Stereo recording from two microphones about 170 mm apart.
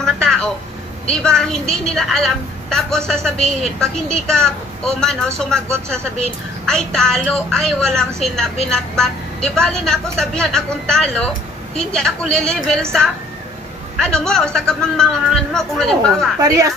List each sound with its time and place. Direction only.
0.0 s a sound: 5° left (ahead or behind)
1.2 s speech: 5° left (ahead or behind)
13.9 s speech: 5° left (ahead or behind)
16.4 s a woman's voice: 20° right (ahead or behind)